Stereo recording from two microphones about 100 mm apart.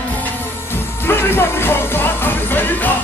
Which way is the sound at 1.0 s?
20° left (ahead or behind).